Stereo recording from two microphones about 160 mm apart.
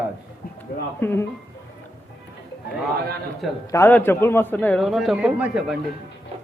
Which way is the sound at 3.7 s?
15° left (ahead or behind).